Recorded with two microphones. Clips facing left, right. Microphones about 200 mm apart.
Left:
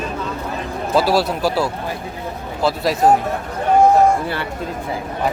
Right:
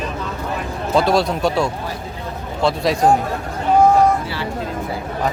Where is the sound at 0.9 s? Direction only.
5° left (ahead or behind).